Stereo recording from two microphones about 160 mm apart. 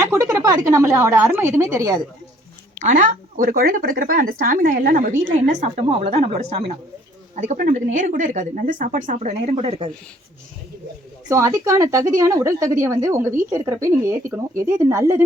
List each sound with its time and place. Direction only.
0.0 s a woman's voice: 20° right (ahead or behind)
2.8 s speech: 55° right (ahead or behind); by 9.9 s 40° right (ahead or behind)
11.3 s a woman's voice: 20° right (ahead or behind)